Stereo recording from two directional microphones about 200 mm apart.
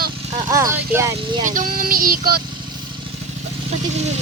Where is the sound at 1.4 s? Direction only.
40° right (ahead or behind).